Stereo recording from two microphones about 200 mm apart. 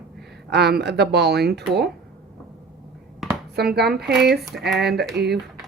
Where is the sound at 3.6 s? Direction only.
55° right (ahead or behind).